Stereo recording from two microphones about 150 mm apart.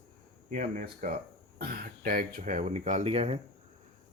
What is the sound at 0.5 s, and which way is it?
Speech, 60° right (ahead or behind).